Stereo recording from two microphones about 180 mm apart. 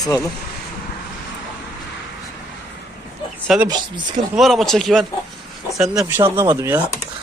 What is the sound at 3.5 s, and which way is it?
Speech, centre (ahead or behind).